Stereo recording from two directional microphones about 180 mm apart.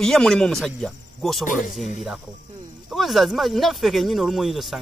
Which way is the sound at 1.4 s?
45° left (ahead or behind).